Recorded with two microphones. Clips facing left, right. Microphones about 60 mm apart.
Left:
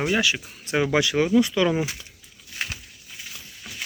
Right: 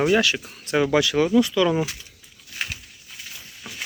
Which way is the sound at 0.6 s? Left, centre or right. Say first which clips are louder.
Right 2 dB; centre.